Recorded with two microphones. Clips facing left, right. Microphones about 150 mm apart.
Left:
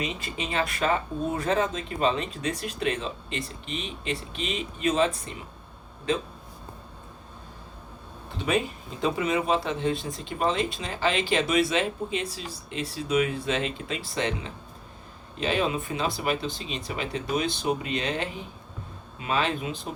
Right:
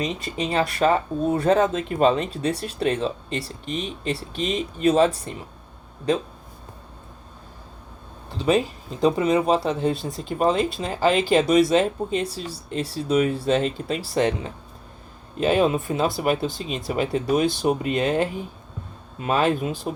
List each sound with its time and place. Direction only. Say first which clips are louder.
0.2 s speech: right 6 dB; 35° right (ahead or behind)
8.4 s speech: right 6 dB; 35° right (ahead or behind)
9.9 s speech: right 2 dB; centre (ahead or behind)
10.2 s speech: right 6 dB; 40° right (ahead or behind)
17.4 s speech: right 8 dB; centre (ahead or behind)
17.7 s speech: right 6 dB; 45° right (ahead or behind)